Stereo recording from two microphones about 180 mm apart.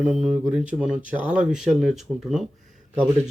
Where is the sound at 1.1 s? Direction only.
10° right (ahead or behind).